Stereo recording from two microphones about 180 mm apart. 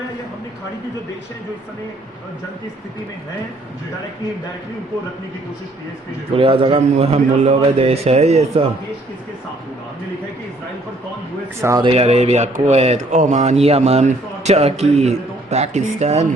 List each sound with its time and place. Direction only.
6.3 s speech: 30° right (ahead or behind)
11.8 s speech: 30° right (ahead or behind)